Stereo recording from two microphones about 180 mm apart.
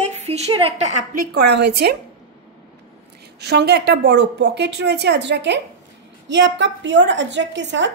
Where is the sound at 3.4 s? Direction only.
65° right (ahead or behind); by 7.9 s 85° right.